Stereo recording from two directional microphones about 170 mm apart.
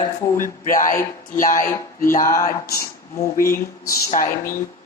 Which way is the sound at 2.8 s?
15° left (ahead or behind).